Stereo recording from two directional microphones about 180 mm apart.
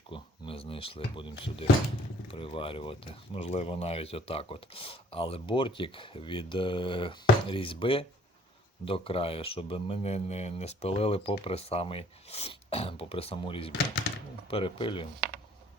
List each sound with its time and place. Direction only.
0.1 s speech: 30° left (ahead or behind)